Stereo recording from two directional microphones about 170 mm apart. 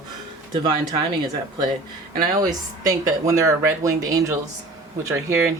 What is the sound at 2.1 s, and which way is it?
Speech, 20° right (ahead or behind).